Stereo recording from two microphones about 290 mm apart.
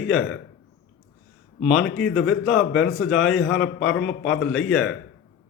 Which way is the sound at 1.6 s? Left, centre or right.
Centre.